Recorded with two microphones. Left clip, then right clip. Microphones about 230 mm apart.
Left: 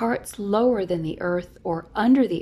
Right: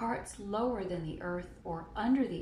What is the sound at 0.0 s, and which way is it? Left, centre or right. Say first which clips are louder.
Speech: left 11 dB; left.